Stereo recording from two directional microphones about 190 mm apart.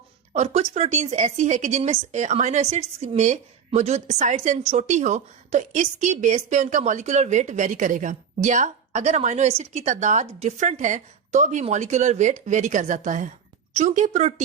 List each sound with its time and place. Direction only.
0.3 s a woman's voice: 35° right (ahead or behind)